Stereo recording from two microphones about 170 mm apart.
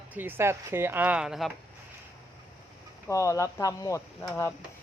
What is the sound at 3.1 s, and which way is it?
Speech, 20° left (ahead or behind).